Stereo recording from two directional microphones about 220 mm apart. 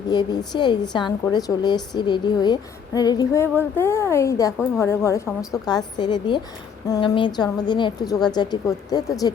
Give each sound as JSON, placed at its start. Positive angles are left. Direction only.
{"t": 0.1, "sound": "a woman's voice", "side_deg": 20}